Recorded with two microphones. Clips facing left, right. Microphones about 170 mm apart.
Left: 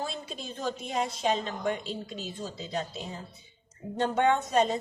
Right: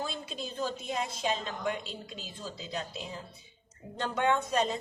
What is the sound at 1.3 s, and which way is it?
A woman's voice, 45° left (ahead or behind).